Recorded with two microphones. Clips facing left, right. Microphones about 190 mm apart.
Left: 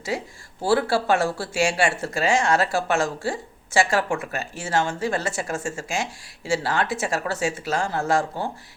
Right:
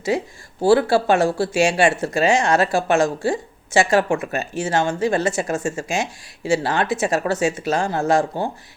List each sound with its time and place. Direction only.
0.1 s speech: 20° right (ahead or behind)